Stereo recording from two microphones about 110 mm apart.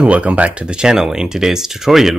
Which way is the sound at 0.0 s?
10° right (ahead or behind).